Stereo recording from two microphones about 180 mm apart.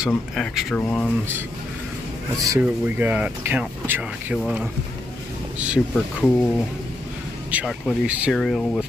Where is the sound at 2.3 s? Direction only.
20° right (ahead or behind).